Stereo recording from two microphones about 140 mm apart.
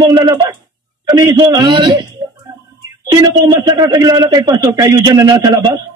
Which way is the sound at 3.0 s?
25° right (ahead or behind).